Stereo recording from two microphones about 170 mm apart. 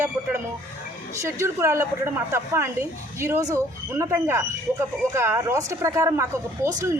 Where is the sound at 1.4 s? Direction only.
15° right (ahead or behind).